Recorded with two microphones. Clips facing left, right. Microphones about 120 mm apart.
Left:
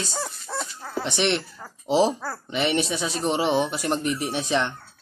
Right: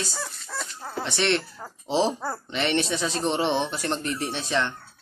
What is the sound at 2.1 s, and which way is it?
Speech, 20° right (ahead or behind).